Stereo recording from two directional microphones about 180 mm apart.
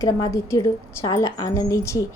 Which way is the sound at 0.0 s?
20° left (ahead or behind).